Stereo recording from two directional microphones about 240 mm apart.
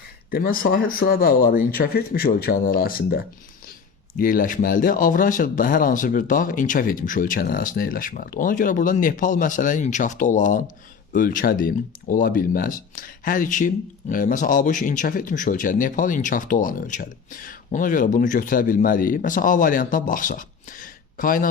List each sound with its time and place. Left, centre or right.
0.3 s speech: left